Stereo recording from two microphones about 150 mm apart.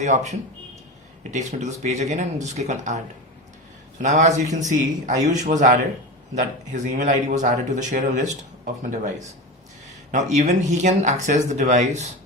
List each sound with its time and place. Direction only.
0.0 s speech: 50° right (ahead or behind)
4.0 s a man's voice: 55° right (ahead or behind)